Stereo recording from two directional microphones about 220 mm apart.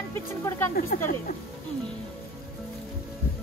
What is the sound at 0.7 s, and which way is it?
Speech, 40° left (ahead or behind).